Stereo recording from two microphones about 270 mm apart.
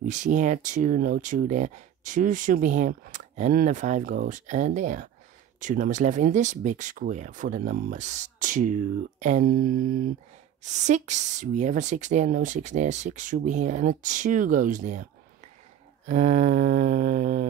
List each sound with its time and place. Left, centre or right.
0.0 s speech: right
16.1 s mantra: right